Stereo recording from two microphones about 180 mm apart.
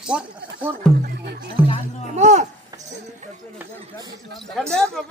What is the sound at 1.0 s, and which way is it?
Speech, 60° right (ahead or behind).